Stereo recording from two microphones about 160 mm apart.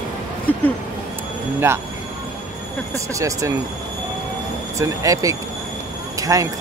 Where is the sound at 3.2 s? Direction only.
20° right (ahead or behind).